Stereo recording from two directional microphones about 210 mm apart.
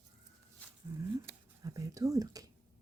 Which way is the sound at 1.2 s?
15° right (ahead or behind).